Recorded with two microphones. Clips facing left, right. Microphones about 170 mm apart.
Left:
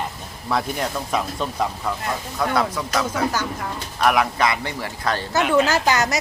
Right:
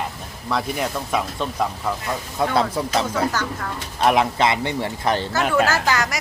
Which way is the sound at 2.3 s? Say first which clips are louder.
Right 2 dB; 30° right (ahead or behind).